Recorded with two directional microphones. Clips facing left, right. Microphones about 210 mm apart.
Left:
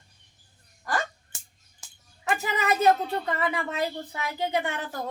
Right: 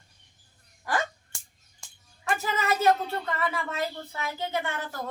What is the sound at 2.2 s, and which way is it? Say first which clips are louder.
A woman's voice: left 2 dB; 15° left (ahead or behind).